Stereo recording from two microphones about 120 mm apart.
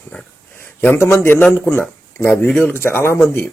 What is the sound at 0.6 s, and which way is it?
Speech, 20° left (ahead or behind).